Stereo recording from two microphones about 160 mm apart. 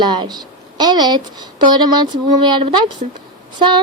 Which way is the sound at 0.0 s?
25° right (ahead or behind).